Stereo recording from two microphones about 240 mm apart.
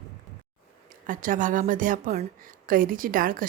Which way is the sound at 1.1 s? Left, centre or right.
Right.